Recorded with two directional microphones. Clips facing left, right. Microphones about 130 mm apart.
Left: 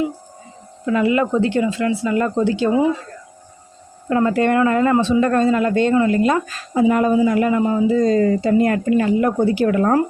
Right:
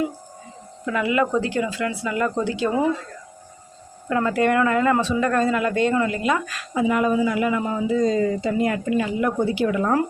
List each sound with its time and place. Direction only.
0.9 s speech: 30° left (ahead or behind)
4.1 s speech: 30° left (ahead or behind)
7.6 s speech: 25° left (ahead or behind)
7.9 s a woman's voice: 45° left (ahead or behind)